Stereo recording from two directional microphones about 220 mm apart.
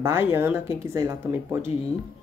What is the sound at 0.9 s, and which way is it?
Speech, 15° right (ahead or behind).